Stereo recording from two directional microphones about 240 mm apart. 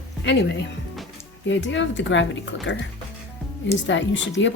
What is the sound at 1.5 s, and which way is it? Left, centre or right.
Speech, left.